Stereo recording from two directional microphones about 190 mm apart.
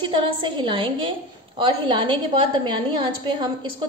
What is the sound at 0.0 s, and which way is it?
A woman's voice, 25° right (ahead or behind).